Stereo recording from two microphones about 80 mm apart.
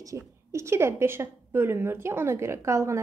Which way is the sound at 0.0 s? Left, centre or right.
Right.